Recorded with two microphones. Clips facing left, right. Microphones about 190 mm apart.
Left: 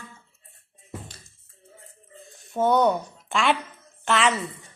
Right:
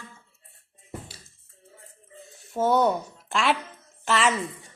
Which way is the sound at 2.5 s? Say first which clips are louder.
Left 1 dB; 5° right (ahead or behind).